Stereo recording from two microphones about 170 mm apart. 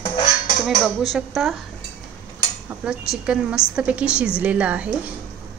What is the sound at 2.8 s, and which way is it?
A woman's voice, 5° right (ahead or behind).